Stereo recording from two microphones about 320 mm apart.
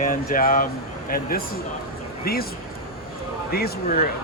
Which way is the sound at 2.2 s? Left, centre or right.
Left.